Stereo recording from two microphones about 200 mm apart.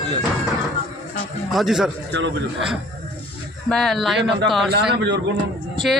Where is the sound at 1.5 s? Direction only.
Centre (ahead or behind).